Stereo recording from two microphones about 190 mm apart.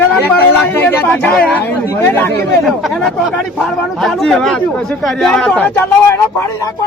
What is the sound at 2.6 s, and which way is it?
A man's voice, centre (ahead or behind).